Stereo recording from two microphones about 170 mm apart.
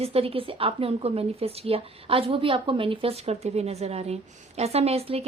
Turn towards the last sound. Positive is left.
turn(degrees=-35)  # may be behind; listen again after turning